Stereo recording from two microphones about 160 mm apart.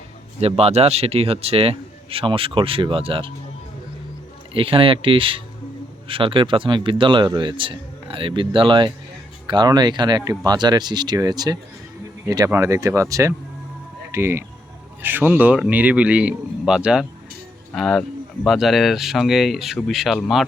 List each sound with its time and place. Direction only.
0.3 s speech: 40° right (ahead or behind)
4.5 s speech: 35° right (ahead or behind); by 20.4 s centre (ahead or behind)